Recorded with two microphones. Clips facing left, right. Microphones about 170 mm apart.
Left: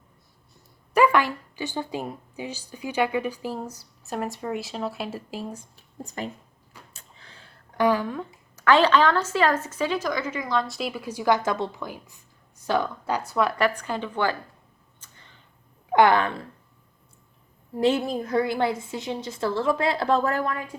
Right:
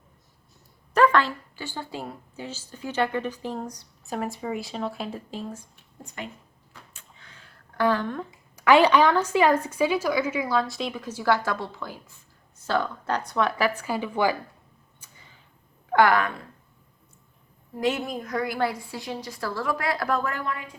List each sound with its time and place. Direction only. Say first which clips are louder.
0.9 s speech: even; 10° left (ahead or behind)
5.7 s a woman's voice: left 4 dB; 40° left (ahead or behind)
6.9 s a sound: left 1 dB; 30° left (ahead or behind)
7.8 s speech: left 2 dB; 10° left (ahead or behind)
8.5 s a woman's voice: right 1 dB; 15° right (ahead or behind)
15.0 s tick-tock: even; 10° right (ahead or behind)
15.9 s a woman's voice: left 2 dB; 20° left (ahead or behind)
17.7 s a woman's voice: left 4 dB; 30° left (ahead or behind)